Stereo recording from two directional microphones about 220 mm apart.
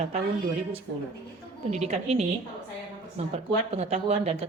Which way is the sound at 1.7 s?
30° right (ahead or behind).